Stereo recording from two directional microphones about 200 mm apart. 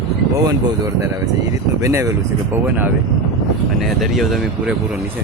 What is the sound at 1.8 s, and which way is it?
Speech, 15° right (ahead or behind).